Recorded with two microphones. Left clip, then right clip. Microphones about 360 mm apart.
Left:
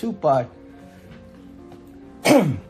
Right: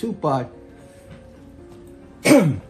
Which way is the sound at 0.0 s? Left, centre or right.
Left.